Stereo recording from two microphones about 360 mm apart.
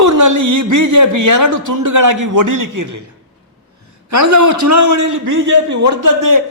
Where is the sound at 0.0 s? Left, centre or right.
Right.